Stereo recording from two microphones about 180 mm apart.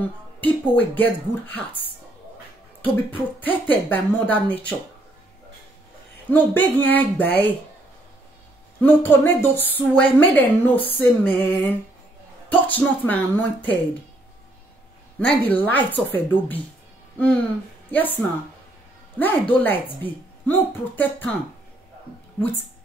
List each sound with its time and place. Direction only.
0.0 s a woman's voice: 10° left (ahead or behind)
6.3 s a woman's voice: 10° left (ahead or behind)
8.8 s a woman's voice: 10° left (ahead or behind)
15.1 s a woman's voice: 10° left (ahead or behind)
17.9 s a woman's voice: 10° left (ahead or behind)